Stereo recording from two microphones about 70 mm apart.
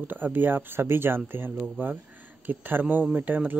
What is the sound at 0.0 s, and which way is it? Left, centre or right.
Speech, right.